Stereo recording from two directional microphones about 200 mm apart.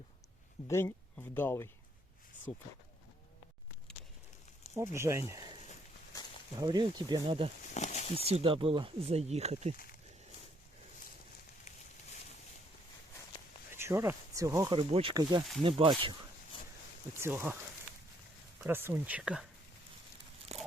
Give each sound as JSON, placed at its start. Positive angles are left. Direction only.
{"t": 0.7, "sound": "speech", "side_deg": 15}
{"t": 4.8, "sound": "speech", "side_deg": -15}
{"t": 5.3, "sound": "a sound", "side_deg": -20}
{"t": 6.6, "sound": "speech", "side_deg": -20}
{"t": 7.7, "sound": "a sound", "side_deg": 35}
{"t": 8.1, "sound": "speech", "side_deg": -30}
{"t": 13.7, "sound": "speech", "side_deg": -15}
{"t": 17.2, "sound": "speech", "side_deg": -10}
{"t": 18.6, "sound": "speech", "side_deg": -10}
{"t": 20.5, "sound": "biting", "side_deg": -30}